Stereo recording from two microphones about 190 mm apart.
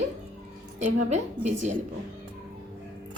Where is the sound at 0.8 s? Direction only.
35° right (ahead or behind).